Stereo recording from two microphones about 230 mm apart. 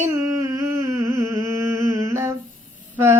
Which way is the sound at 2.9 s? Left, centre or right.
Centre.